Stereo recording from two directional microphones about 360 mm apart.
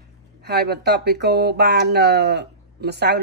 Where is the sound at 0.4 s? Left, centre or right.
Right.